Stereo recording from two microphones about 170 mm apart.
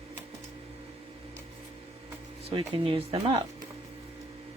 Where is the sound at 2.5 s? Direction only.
35° right (ahead or behind).